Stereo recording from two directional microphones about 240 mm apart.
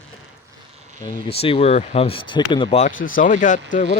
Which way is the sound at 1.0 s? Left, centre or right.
Left.